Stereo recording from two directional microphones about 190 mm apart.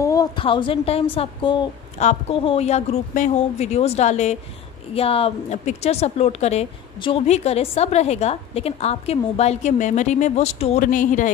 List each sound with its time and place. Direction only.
0.0 s a woman's voice: 20° left (ahead or behind); by 11.2 s 45° left (ahead or behind)